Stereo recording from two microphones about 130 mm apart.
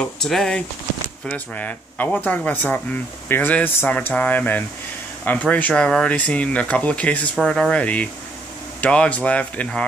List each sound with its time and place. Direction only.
0.0 s speech: 5° left (ahead or behind)